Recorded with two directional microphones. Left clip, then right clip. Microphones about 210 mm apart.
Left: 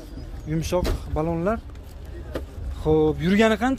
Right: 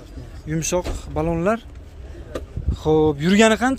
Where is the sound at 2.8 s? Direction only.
20° right (ahead or behind).